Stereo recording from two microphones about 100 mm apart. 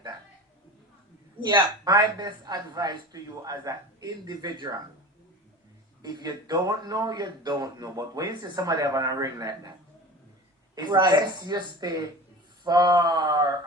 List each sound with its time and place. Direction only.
1.4 s a man's voice: 45° right (ahead or behind)
6.0 s a man's voice: 45° right (ahead or behind)
10.8 s a man's voice: 45° right (ahead or behind)